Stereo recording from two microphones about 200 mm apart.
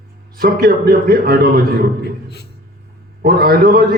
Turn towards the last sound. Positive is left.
turn(degrees=-50)  # may be behind; listen again after turning